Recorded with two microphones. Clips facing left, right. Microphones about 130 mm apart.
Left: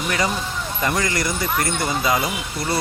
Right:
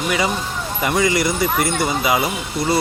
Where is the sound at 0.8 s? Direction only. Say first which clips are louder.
Right 5 dB; 10° right (ahead or behind).